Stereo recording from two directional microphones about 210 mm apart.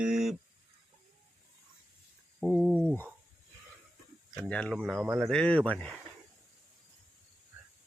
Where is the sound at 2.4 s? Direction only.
Centre (ahead or behind).